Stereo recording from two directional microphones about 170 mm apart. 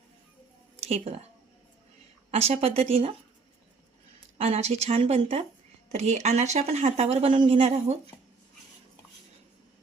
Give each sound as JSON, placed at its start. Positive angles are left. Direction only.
{"t": 0.8, "sound": "speech", "side_deg": -35}
{"t": 2.3, "sound": "speech", "side_deg": -35}
{"t": 4.4, "sound": "speech", "side_deg": -40}